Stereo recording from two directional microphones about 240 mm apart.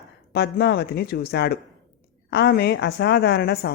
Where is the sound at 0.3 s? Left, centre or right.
Left.